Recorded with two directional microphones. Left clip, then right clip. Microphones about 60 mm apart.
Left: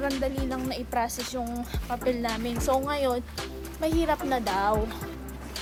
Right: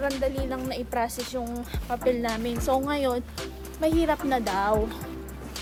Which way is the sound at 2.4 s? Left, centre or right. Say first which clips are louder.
Left 2 dB; right.